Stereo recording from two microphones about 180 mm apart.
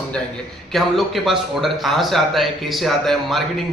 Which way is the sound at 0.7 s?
Centre (ahead or behind).